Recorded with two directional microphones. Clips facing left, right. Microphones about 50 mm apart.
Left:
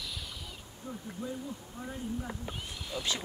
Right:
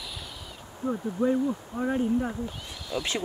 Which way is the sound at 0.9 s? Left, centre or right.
Right.